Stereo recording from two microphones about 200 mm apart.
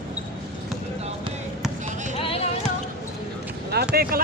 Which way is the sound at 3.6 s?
50° right (ahead or behind).